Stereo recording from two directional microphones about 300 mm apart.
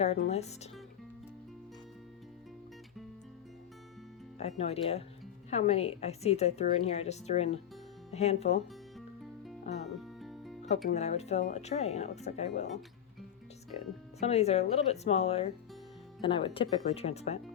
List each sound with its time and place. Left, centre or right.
0.0 s a woman's voice: left
4.4 s a woman's voice: left
9.7 s a woman's voice: left
10.2 s music: centre
10.8 s a woman's voice: left
13.7 s a woman's voice: left